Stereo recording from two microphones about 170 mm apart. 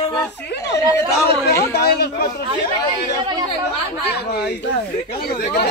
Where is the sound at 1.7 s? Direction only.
70° left (ahead or behind).